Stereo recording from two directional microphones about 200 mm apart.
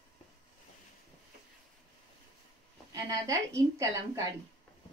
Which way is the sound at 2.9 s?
15° right (ahead or behind).